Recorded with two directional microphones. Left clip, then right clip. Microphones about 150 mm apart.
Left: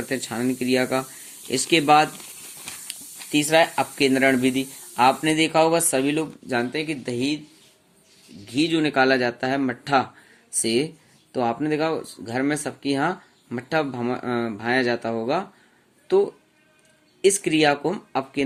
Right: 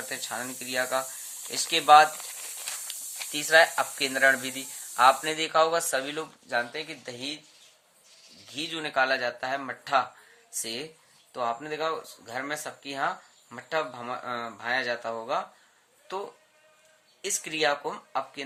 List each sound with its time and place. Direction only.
0.1 s speech: 15° left (ahead or behind)
3.3 s speech: 20° left (ahead or behind)
8.4 s speech: 25° left (ahead or behind)